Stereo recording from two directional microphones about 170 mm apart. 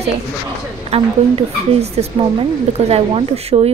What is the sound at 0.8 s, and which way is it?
Speech, 35° right (ahead or behind).